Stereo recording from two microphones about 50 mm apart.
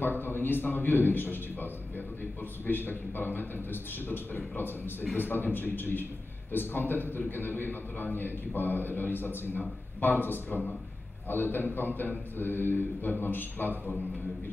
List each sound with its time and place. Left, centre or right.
0.0 s a man's voice: left